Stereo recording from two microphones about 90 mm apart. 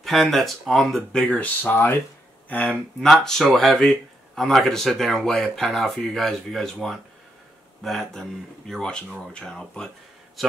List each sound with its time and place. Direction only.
0.0 s speech: centre (ahead or behind)
1.2 s speech: 15° left (ahead or behind)
3.0 s speech: 5° left (ahead or behind)